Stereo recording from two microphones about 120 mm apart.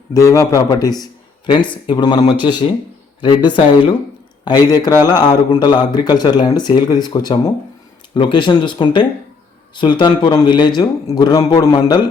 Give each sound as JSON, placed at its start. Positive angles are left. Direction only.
{"t": 0.1, "sound": "a man's voice", "side_deg": 25}